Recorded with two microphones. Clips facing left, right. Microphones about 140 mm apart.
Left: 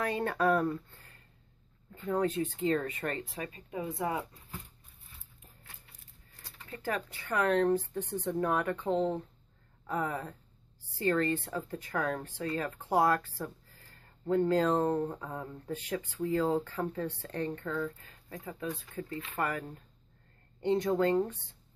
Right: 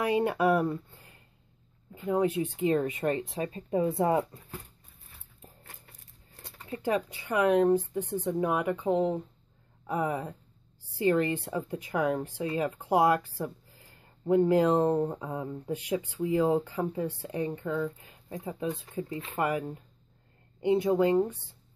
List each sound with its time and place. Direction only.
0.0 s speech: 15° right (ahead or behind)
3.4 s speech: 35° right (ahead or behind)
6.4 s speech: 20° right (ahead or behind)